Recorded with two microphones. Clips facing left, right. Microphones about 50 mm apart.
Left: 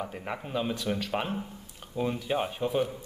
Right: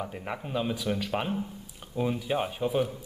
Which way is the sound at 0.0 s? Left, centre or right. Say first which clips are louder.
Even; centre.